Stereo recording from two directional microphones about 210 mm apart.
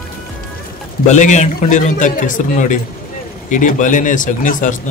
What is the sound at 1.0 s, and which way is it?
A man's voice, 35° left (ahead or behind).